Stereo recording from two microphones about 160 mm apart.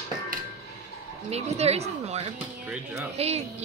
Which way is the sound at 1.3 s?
40° right (ahead or behind).